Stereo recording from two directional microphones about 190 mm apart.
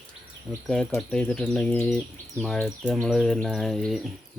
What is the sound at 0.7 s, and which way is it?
Speech, 5° left (ahead or behind).